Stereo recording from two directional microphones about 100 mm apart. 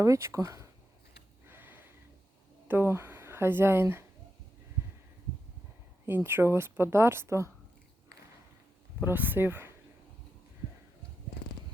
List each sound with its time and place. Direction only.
0.0 s speech: 30° right (ahead or behind)
1.5 s a sound: 20° right (ahead or behind)
2.6 s speech: 20° right (ahead or behind)
6.1 s a woman's voice: 20° right (ahead or behind)
9.0 s a woman's voice: 20° right (ahead or behind)